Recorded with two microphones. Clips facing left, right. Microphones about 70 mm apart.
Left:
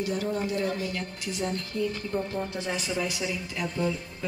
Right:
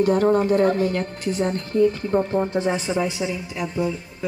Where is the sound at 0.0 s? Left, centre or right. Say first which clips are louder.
Right 11 dB; right.